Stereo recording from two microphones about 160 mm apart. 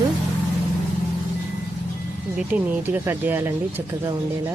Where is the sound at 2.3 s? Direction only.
10° right (ahead or behind).